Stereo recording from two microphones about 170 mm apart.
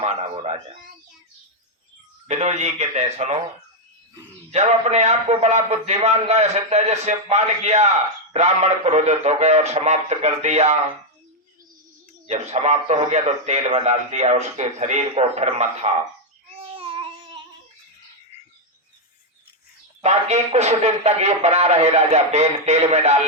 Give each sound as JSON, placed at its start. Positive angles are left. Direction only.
{"t": 0.0, "sound": "speech", "side_deg": -35}
{"t": 2.2, "sound": "a man's voice", "side_deg": -40}
{"t": 4.5, "sound": "a man's voice", "side_deg": -40}
{"t": 12.3, "sound": "a man's voice", "side_deg": -40}
{"t": 16.5, "sound": "babbling", "side_deg": -35}
{"t": 20.0, "sound": "a man's voice", "side_deg": -40}